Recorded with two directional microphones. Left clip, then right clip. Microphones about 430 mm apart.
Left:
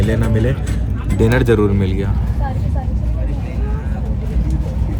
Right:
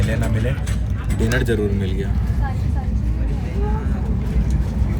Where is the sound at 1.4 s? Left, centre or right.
Centre.